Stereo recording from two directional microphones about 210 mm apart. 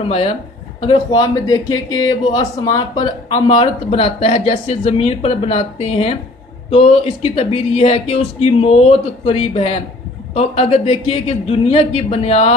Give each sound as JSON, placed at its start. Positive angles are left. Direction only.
{"t": 0.8, "sound": "a man's voice", "side_deg": 20}